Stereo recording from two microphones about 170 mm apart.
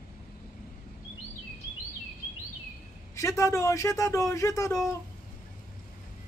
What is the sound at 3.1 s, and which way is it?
A man's voice, 15° left (ahead or behind).